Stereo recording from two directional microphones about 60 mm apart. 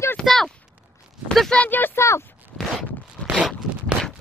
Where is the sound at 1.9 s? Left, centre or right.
Left.